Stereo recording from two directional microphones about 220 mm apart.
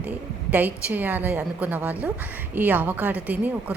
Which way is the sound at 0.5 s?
5° right (ahead or behind).